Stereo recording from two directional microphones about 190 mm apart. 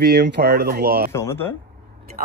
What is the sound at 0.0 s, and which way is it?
Speech, 60° right (ahead or behind).